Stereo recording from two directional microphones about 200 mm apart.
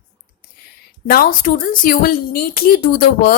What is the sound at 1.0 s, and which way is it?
A woman's voice, 50° left (ahead or behind).